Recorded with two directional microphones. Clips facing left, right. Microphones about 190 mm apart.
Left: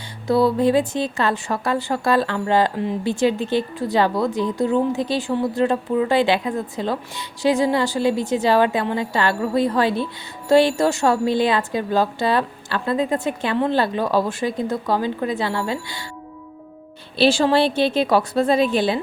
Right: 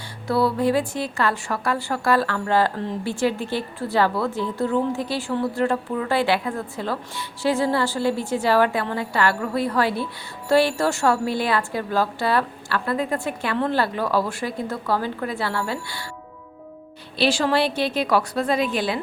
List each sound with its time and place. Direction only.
0.3 s a woman's voice: 20° left (ahead or behind)
17.2 s a woman's voice: 25° left (ahead or behind)